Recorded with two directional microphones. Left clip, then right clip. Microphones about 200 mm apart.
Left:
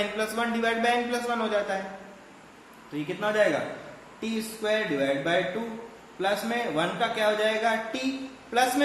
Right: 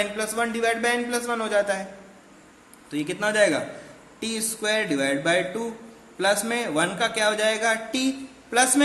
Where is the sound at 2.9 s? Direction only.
50° right (ahead or behind).